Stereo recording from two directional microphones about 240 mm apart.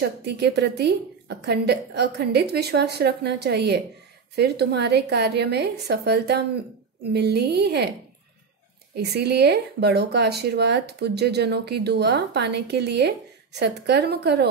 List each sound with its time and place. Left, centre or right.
0.0 s speech: right
8.9 s speech: right